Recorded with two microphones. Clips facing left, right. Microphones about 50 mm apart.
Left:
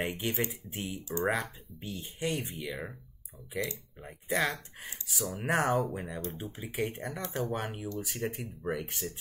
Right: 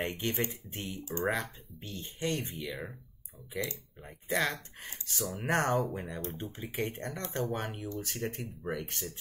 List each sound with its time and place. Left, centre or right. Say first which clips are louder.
0.0 s speech: left 1 dB; centre